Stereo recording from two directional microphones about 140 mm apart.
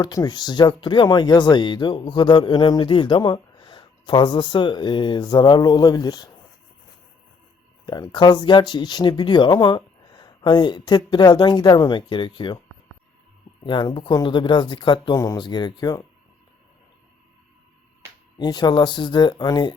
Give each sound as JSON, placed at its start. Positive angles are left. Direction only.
{"t": 0.0, "sound": "speech", "side_deg": 30}
{"t": 7.9, "sound": "speech", "side_deg": 30}
{"t": 13.7, "sound": "speech", "side_deg": 35}
{"t": 18.3, "sound": "speech", "side_deg": 30}